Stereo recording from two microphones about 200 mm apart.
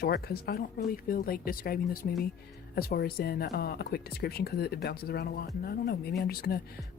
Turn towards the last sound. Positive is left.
turn(degrees=50)  # may be behind; listen again after turning